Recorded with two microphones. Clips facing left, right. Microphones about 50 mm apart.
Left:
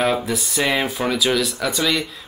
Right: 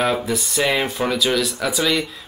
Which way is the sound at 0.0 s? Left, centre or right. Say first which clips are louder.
Even; centre.